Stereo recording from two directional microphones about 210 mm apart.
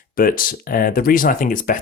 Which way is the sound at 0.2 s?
40° left (ahead or behind).